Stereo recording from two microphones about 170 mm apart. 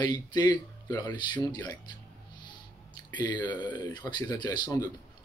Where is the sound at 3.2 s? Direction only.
25° left (ahead or behind).